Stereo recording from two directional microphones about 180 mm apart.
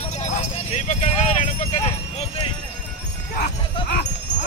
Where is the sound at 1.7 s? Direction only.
35° left (ahead or behind).